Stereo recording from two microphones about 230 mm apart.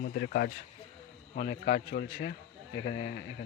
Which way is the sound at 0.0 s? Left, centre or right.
Left.